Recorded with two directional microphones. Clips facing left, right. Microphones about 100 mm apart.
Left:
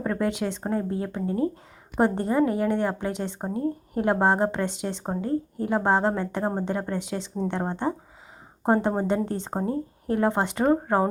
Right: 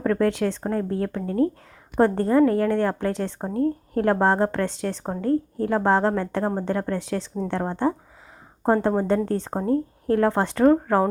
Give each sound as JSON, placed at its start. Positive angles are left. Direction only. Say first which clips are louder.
{"t": 0.0, "sound": "a woman's voice", "louder": "right 5 dB", "side_deg": 10}